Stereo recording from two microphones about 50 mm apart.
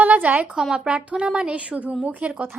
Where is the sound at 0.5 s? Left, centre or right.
Centre.